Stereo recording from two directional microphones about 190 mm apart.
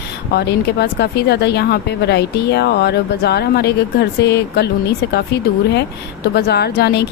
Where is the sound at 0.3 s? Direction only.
60° left (ahead or behind).